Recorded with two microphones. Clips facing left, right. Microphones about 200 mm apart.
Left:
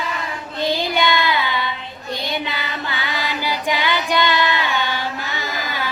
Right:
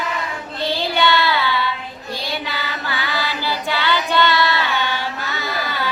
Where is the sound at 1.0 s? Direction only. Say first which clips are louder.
Right 4 dB; 15° left (ahead or behind).